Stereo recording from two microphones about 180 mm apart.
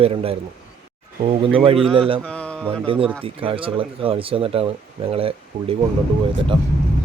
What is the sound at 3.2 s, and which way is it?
Speech, 30° right (ahead or behind).